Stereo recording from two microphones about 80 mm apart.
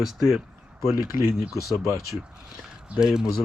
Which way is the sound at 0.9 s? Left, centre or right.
Left.